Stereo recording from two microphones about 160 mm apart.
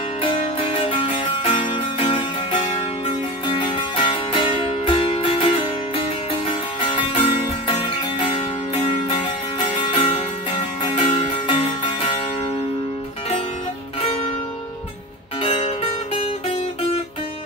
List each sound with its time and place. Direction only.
0.2 s music: 35° left (ahead or behind)
9.6 s music: 35° left (ahead or behind)
15.4 s music: 35° left (ahead or behind)